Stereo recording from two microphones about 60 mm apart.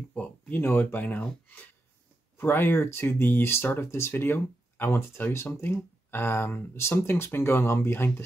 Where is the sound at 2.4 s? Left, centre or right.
Left.